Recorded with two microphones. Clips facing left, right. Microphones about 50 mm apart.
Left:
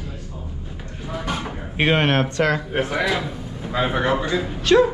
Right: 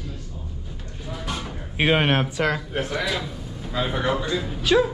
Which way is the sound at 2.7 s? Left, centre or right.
Left.